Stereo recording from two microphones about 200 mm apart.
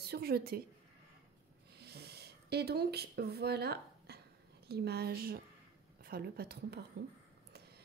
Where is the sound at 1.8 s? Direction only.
55° right (ahead or behind).